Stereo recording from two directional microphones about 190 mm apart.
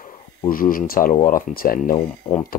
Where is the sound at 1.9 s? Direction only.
20° left (ahead or behind).